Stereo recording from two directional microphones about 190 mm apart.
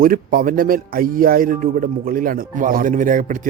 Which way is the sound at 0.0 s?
50° right (ahead or behind).